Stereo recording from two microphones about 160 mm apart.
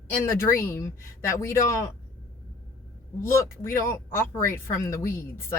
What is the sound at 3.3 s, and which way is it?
Speech, 15° left (ahead or behind).